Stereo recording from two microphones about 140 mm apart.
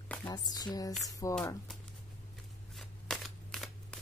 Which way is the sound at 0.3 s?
30° left (ahead or behind).